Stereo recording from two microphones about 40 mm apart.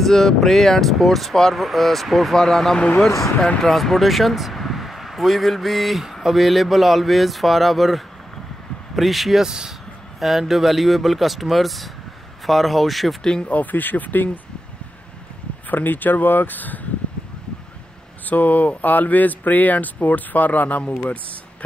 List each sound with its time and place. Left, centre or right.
0.0 s speech: centre
2.3 s speech: centre
9.4 s speech: centre
10.2 s speech: centre
13.2 s speech: left
13.5 s speech: left
15.7 s speech: left
18.2 s speech: left